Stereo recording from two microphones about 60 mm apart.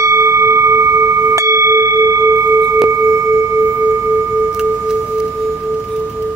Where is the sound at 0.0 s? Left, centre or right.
Right.